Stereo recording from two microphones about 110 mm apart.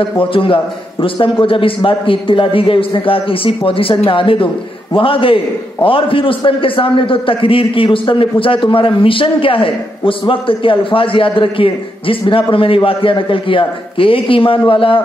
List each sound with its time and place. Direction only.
0.2 s a man's voice: 55° left (ahead or behind)